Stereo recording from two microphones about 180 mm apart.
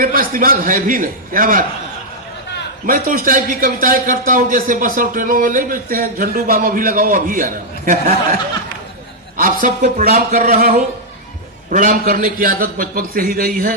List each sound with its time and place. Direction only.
0.0 s a man's voice: 50° right (ahead or behind)
2.8 s a man's voice: 50° right (ahead or behind)
9.4 s a man's voice: 45° right (ahead or behind)